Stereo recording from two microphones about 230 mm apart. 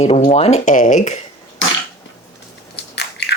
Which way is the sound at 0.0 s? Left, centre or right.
Left.